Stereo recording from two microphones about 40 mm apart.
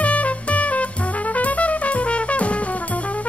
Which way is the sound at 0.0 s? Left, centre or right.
Left.